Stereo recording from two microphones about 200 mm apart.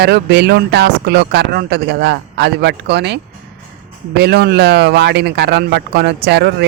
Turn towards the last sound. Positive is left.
turn(degrees=-55)  # may be behind; listen again after turning